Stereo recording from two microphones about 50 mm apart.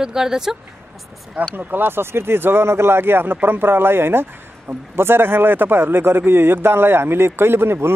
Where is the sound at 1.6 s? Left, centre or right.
Right.